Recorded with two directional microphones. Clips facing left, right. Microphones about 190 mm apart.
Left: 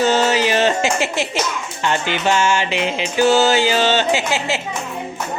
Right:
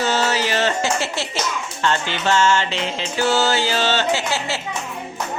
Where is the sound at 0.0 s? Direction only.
15° left (ahead or behind).